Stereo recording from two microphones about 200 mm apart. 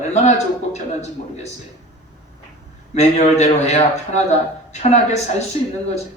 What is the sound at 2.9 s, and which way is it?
Speech, 35° left (ahead or behind).